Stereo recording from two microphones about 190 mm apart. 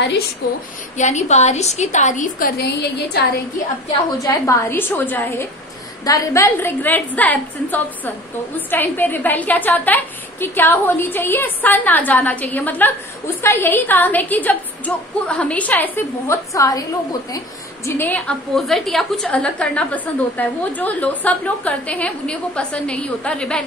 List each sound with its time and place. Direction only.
0.9 s a woman's voice: 40° left (ahead or behind); by 3.3 s 60° left (ahead or behind)
4.2 s a woman's voice: 15° left (ahead or behind)
17.8 s a woman's voice: 10° left (ahead or behind)